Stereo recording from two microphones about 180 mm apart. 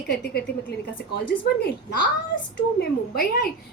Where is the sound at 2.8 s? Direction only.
60° left (ahead or behind).